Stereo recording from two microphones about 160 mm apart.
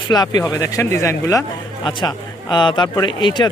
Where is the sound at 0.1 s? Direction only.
25° left (ahead or behind).